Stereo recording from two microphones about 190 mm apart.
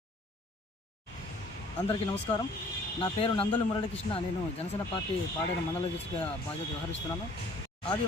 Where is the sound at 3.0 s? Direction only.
30° left (ahead or behind).